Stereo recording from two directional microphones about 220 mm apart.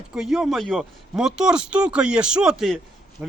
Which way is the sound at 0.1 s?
Centre (ahead or behind).